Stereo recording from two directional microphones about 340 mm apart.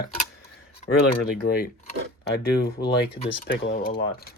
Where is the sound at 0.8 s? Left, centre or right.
Left.